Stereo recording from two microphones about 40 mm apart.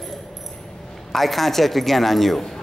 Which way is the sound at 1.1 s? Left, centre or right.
Centre.